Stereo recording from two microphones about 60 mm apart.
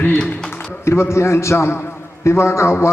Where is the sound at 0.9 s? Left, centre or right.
Left.